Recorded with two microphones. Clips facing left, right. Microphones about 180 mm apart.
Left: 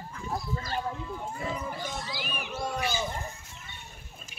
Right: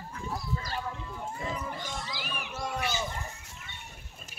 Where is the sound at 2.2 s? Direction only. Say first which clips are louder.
Left 2 dB; 20° left (ahead or behind).